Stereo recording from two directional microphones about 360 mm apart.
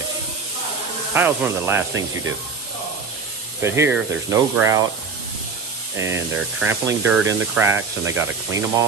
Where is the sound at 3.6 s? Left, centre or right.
Centre.